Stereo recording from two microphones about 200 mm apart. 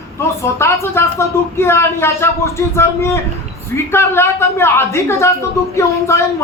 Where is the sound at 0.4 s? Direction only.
15° left (ahead or behind).